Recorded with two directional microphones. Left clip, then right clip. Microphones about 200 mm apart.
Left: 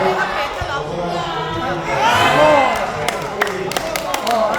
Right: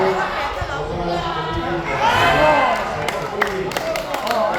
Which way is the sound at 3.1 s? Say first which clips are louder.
Left 1 dB; 40° left (ahead or behind).